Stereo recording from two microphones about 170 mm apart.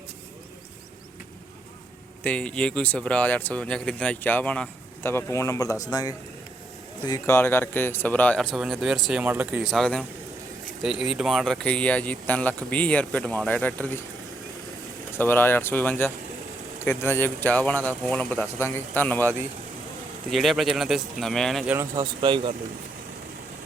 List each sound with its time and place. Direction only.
2.2 s speech: 5° left (ahead or behind)
15.2 s speech: 10° left (ahead or behind)
21.7 s speech: 15° right (ahead or behind)
22.0 s speech: 30° right (ahead or behind)